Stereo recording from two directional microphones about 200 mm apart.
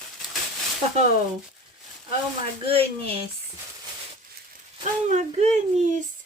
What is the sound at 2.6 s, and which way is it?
Speech, 30° right (ahead or behind).